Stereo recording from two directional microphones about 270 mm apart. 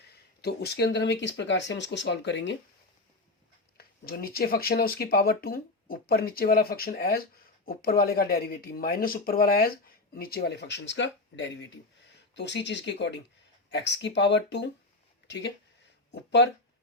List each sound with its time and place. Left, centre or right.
0.4 s speech: left
3.8 s speech: left